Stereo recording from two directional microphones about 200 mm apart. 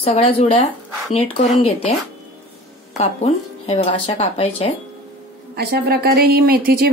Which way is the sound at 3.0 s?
30° left (ahead or behind).